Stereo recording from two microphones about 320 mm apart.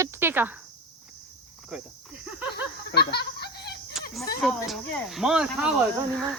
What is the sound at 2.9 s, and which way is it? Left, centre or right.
Snicker, left.